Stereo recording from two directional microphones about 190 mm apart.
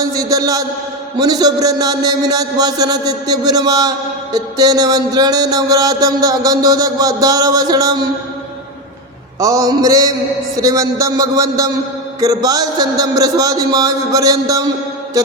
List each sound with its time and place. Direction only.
0.0 s a man's voice: 20° right (ahead or behind)
9.4 s a man's voice: 15° right (ahead or behind)